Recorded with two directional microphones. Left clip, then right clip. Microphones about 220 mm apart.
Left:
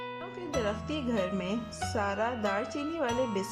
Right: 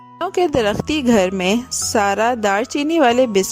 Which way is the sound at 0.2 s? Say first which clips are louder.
Right 19 dB; 45° right (ahead or behind).